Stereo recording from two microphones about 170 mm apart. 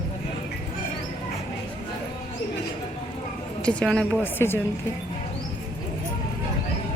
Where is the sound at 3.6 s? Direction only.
5° left (ahead or behind).